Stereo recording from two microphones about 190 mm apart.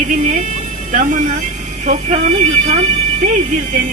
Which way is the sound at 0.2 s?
40° right (ahead or behind).